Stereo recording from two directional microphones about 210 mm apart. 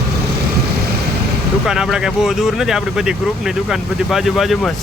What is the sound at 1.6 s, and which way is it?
Speech, centre (ahead or behind).